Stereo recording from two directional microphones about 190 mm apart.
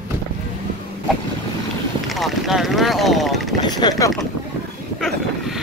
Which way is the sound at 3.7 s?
20° left (ahead or behind).